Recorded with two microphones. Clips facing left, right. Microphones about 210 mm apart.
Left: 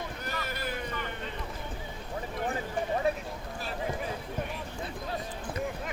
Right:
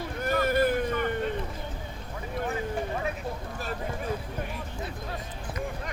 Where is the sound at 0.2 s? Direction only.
50° right (ahead or behind).